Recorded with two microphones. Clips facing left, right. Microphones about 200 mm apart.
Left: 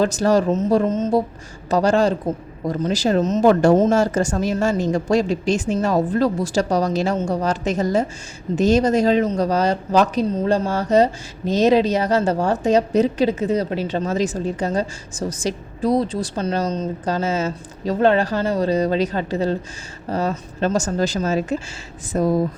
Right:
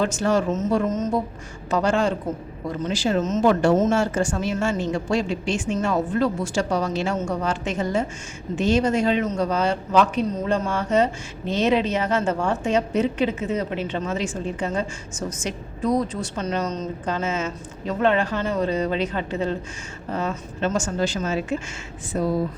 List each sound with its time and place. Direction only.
0.0 s speech: 35° left (ahead or behind)